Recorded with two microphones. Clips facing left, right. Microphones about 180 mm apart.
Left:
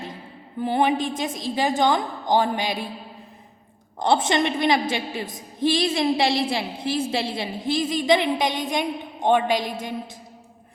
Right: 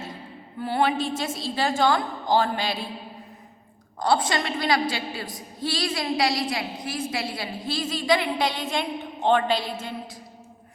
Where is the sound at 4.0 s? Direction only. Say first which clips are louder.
Left 3 dB; 25° left (ahead or behind).